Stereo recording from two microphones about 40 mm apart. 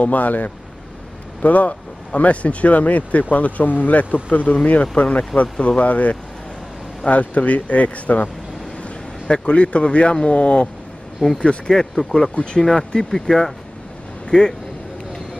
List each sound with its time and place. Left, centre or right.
0.0 s speech: left
4.9 s speech: left
11.7 s speech: centre
12.4 s speech: left
12.6 s speech: centre